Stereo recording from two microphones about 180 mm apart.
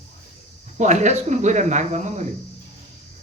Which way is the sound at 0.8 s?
40° right (ahead or behind).